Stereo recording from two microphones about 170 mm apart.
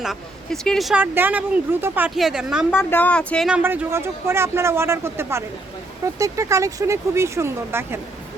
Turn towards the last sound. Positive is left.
turn(degrees=-15)  # may be behind; listen again after turning